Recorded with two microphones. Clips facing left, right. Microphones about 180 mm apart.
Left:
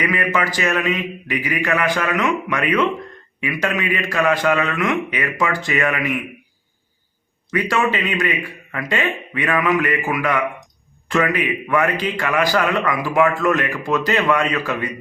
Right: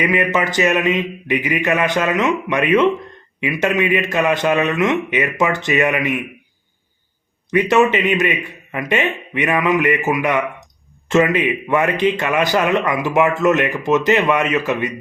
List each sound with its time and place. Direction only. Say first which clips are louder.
0.0 s a man's voice: right 3 dB; 20° right (ahead or behind)
7.5 s a man's voice: right 6 dB; 20° right (ahead or behind)